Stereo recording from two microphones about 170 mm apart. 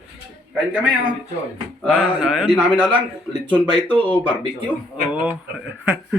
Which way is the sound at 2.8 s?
10° right (ahead or behind).